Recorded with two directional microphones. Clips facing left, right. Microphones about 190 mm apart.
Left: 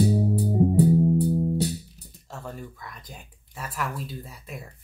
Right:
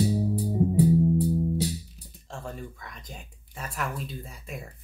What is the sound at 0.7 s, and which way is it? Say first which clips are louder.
Music: even; 65° left (ahead or behind).